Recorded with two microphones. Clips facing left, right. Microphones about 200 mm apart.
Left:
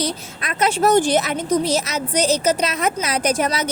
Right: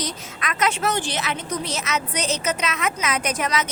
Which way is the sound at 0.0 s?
30° left (ahead or behind).